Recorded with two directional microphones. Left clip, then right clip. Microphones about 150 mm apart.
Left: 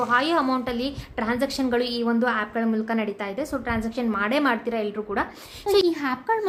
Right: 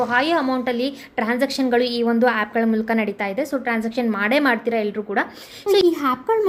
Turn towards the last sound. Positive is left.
turn(degrees=-20)  # may be behind; listen again after turning